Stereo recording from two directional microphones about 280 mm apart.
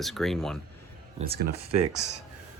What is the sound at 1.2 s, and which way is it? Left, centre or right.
Speech, right.